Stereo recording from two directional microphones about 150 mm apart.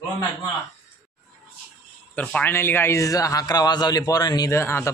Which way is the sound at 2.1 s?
10° left (ahead or behind).